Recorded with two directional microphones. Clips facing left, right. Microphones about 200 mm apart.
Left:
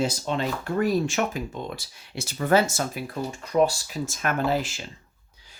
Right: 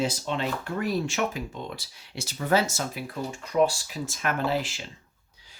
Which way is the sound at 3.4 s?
40° left (ahead or behind).